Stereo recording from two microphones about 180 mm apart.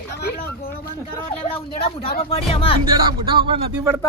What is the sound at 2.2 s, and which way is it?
Speech, 35° left (ahead or behind).